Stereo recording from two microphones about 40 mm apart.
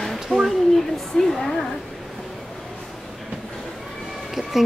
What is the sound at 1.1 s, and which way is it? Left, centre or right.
Speech, centre.